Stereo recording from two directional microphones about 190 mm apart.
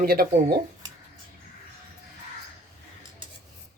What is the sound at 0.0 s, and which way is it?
Speech, 50° right (ahead or behind).